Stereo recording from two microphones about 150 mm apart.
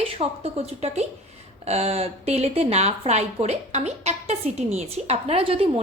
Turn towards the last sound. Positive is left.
turn(degrees=-40)  # may be behind; listen again after turning